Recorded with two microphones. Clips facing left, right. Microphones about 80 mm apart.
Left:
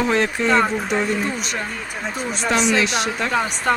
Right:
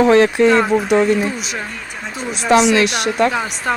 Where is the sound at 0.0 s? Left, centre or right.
Right.